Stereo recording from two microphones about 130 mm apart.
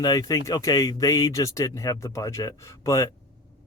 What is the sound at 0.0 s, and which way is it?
A man's voice, 30° left (ahead or behind).